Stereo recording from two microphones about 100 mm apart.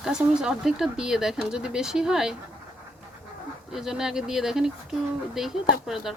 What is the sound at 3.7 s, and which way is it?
Speech, 5° right (ahead or behind).